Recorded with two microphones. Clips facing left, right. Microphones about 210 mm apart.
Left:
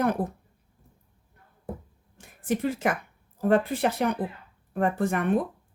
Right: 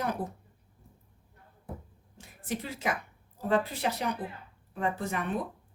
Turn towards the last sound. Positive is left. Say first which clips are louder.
# left 7 dB
turn(degrees=50)  # may be behind; listen again after turning